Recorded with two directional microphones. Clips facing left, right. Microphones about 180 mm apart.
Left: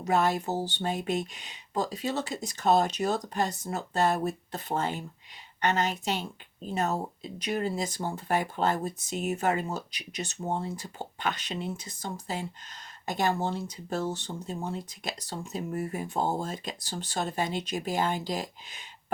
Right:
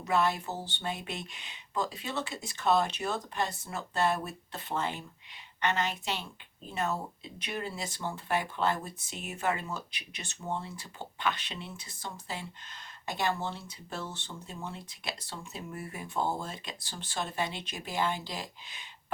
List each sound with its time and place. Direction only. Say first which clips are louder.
0.0 s speech: left 3 dB; 45° left (ahead or behind)